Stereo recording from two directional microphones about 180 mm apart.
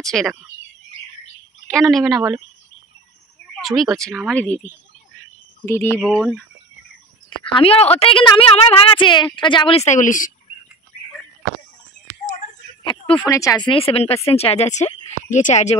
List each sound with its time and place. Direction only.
0.0 s speech: centre (ahead or behind)
1.7 s speech: centre (ahead or behind)
3.6 s speech: centre (ahead or behind)
5.7 s speech: 15° left (ahead or behind)
7.2 s a woman's voice: 30° left (ahead or behind); by 10.3 s 45° left (ahead or behind)
12.8 s a sound: 25° left (ahead or behind)
13.2 s speech: 15° left (ahead or behind)
13.7 s a woman's voice: 30° left (ahead or behind)